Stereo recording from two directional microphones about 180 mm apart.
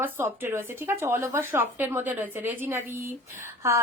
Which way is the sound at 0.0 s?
15° right (ahead or behind).